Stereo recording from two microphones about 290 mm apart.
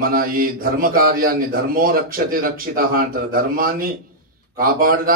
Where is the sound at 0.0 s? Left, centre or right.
Right.